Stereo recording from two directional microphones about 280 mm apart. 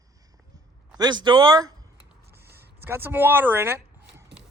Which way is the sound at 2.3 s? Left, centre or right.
Right.